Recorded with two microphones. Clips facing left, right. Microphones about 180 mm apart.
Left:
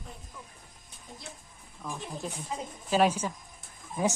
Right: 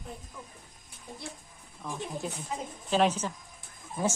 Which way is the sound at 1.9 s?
Centre (ahead or behind).